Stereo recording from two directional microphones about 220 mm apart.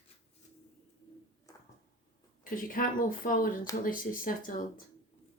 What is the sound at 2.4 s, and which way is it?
Speech, 40° left (ahead or behind).